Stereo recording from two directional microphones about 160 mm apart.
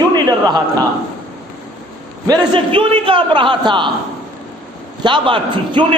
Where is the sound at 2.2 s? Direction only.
25° right (ahead or behind).